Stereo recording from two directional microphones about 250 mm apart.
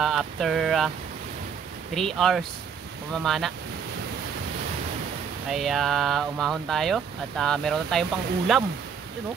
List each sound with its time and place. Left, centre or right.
0.0 s speech: centre
2.0 s speech: centre
5.5 s speech: centre